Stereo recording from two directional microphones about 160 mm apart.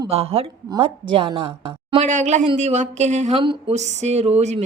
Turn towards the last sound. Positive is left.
turn(degrees=-45)  # may be behind; listen again after turning